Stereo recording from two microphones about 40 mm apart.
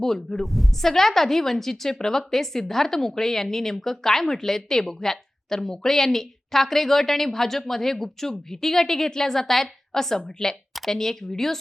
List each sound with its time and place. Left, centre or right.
0.0 s a woman's voice: centre